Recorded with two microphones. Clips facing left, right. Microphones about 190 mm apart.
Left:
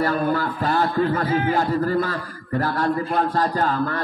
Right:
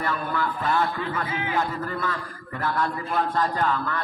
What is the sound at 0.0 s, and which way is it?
Speech, 35° left (ahead or behind).